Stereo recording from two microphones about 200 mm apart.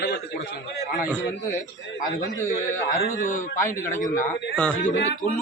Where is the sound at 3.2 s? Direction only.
40° left (ahead or behind).